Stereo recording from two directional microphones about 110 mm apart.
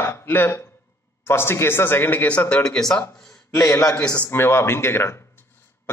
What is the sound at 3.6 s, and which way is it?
Speech, 35° left (ahead or behind).